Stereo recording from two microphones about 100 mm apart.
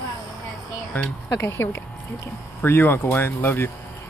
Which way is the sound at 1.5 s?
25° left (ahead or behind).